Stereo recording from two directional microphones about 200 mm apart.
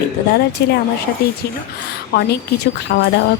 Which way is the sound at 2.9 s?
55° left (ahead or behind).